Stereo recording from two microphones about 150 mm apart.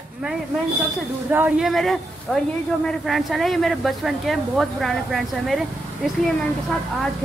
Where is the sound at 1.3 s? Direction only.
10° right (ahead or behind).